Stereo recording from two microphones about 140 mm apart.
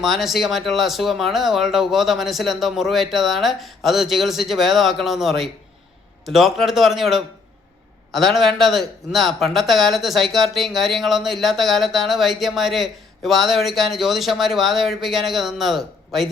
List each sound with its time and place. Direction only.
0.0 s speech: centre (ahead or behind)